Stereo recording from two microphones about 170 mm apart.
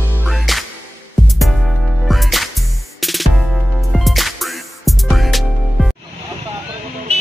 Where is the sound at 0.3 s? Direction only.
Centre (ahead or behind).